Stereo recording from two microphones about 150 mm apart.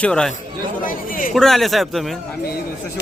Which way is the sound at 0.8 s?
65° left (ahead or behind).